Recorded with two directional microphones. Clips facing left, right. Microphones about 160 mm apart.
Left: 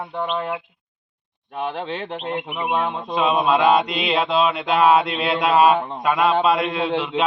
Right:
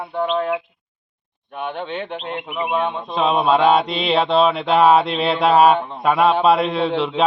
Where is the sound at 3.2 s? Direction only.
25° right (ahead or behind).